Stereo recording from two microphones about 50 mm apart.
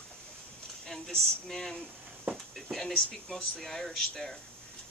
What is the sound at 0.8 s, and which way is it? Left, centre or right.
Speech, centre.